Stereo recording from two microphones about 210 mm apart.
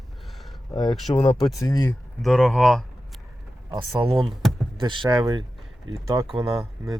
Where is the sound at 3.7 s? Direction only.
25° right (ahead or behind).